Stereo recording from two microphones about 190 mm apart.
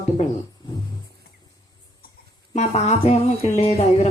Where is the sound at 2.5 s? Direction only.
35° left (ahead or behind).